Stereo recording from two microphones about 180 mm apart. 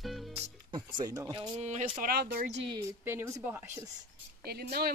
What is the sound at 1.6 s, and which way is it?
Speech, 40° right (ahead or behind).